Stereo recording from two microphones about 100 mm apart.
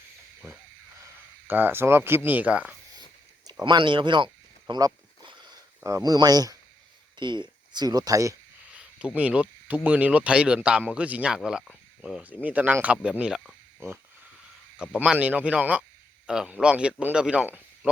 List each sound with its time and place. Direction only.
1.5 s speech: 20° right (ahead or behind)
3.4 s speech: 50° right (ahead or behind)
4.7 s a sound: 50° right (ahead or behind)
5.8 s speech: 35° right (ahead or behind)
7.2 s speech: 50° right (ahead or behind); by 8.4 s 35° right (ahead or behind)
8.7 s speech: 10° right (ahead or behind)
15.0 s speech: 10° right (ahead or behind)